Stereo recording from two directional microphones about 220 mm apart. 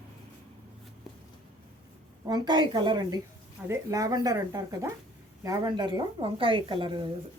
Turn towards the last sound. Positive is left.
turn(degrees=-20)  # may be behind; listen again after turning